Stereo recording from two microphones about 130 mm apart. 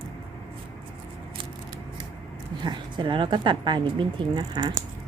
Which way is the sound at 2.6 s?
35° right (ahead or behind).